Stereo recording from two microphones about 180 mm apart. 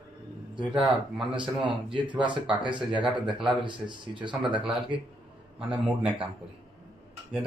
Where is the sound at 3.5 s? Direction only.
25° right (ahead or behind).